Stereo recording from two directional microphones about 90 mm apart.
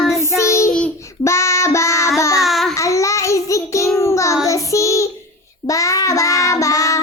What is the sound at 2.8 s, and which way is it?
Child singing, 35° left (ahead or behind).